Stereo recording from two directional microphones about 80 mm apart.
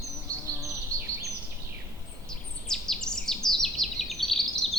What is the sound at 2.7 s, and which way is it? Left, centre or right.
Bird vocalization, centre.